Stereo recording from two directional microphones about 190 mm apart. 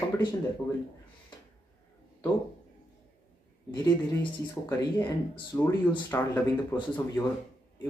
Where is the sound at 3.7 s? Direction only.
20° left (ahead or behind).